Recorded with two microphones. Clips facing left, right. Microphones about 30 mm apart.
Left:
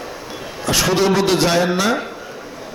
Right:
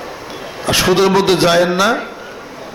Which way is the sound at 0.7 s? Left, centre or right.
Right.